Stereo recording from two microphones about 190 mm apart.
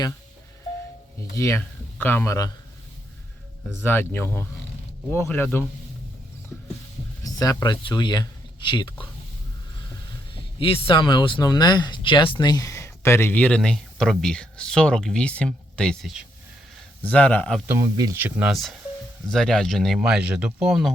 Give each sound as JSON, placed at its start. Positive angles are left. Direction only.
{"t": 1.4, "sound": "speech", "side_deg": 10}
{"t": 3.8, "sound": "speech", "side_deg": 10}
{"t": 7.3, "sound": "speech", "side_deg": 20}
{"t": 10.3, "sound": "speech", "side_deg": 30}
{"t": 17.7, "sound": "speech", "side_deg": -20}